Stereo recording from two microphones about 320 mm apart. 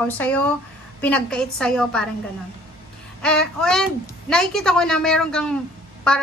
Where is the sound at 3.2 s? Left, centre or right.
Centre.